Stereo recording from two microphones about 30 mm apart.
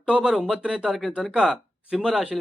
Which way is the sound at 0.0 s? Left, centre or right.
Right.